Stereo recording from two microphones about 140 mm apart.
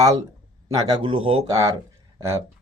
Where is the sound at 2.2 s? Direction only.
20° right (ahead or behind).